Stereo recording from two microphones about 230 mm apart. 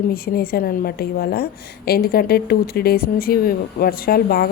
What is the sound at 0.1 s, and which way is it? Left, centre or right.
A woman's voice, left.